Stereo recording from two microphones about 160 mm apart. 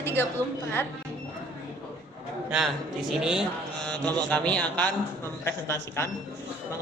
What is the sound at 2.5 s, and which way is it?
Speech, 5° right (ahead or behind).